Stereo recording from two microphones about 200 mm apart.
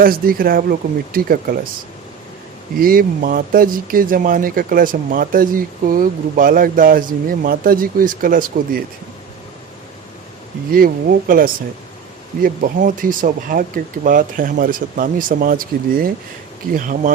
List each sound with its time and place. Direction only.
0.0 s speech: 45° right (ahead or behind)
2.8 s speech: 45° right (ahead or behind)
10.7 s speech: 45° right (ahead or behind)